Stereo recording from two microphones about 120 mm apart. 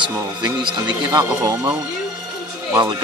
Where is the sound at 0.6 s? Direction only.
40° right (ahead or behind).